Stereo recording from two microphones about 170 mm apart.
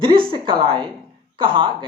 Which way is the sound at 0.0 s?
30° right (ahead or behind).